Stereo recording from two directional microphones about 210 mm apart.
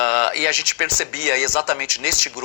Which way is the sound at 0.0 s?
50° left (ahead or behind).